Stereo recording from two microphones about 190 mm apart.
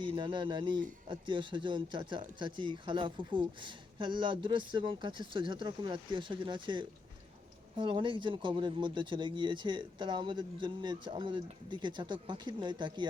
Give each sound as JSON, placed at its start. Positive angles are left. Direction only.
{"t": 0.0, "sound": "speech", "side_deg": -25}